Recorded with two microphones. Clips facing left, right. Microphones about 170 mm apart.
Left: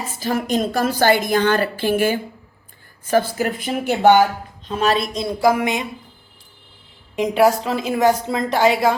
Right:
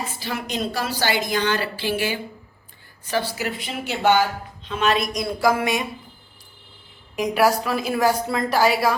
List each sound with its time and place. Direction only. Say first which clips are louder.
0.2 s a woman's voice: left 9 dB; 45° left (ahead or behind); by 5.8 s 20° left (ahead or behind)
7.2 s a woman's voice: left 3 dB; 25° left (ahead or behind)